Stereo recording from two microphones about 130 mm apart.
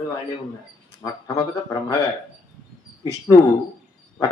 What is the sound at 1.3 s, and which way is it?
Speech, 30° left (ahead or behind).